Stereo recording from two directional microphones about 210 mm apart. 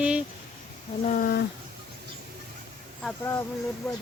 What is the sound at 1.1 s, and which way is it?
Speech, 45° left (ahead or behind).